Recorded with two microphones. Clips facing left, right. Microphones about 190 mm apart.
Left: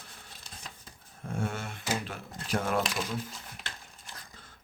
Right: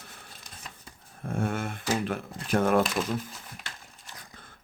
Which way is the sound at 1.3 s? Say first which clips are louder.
Right 5 dB; 55° right (ahead or behind).